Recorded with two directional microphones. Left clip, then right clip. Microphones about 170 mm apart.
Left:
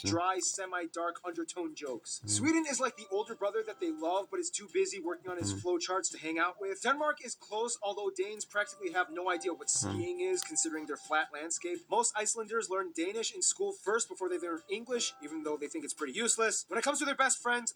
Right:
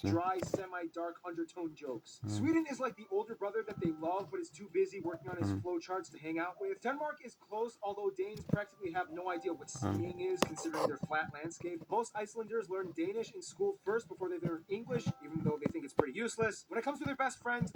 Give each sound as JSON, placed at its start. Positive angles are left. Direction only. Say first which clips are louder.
{"t": 0.1, "sound": "speech", "louder": "left 3 dB", "side_deg": 35}